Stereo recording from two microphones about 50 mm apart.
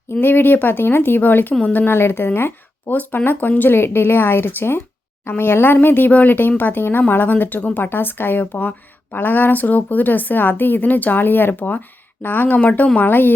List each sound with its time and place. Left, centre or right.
0.2 s speech: left
2.9 s speech: left
3.6 s speech: left
12.5 s speech: left
13.0 s speech: left